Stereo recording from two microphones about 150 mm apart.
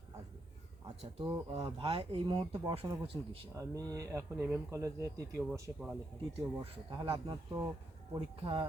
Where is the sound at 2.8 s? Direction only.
20° right (ahead or behind).